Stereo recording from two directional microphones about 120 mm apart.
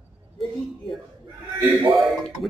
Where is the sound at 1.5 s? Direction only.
15° right (ahead or behind).